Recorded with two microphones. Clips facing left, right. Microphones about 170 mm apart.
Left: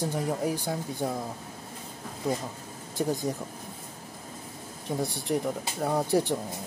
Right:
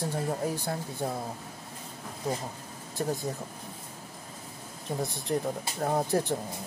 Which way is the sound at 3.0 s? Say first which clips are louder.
Left 3 dB; 15° left (ahead or behind).